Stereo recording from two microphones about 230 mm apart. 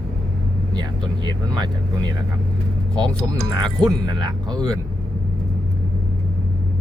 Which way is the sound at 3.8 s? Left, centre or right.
Centre.